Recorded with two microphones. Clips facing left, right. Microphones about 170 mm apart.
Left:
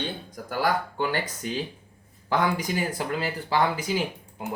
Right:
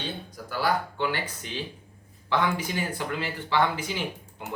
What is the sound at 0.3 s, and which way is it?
Speech, 50° left (ahead or behind).